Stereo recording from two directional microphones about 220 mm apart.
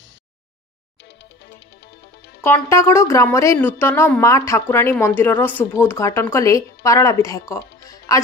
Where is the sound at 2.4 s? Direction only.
10° left (ahead or behind).